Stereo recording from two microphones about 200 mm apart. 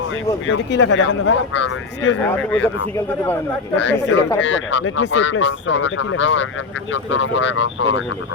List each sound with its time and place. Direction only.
0.4 s speech: 75° left (ahead or behind)
2.2 s speech: 10° left (ahead or behind)
3.8 s speech: 65° left (ahead or behind)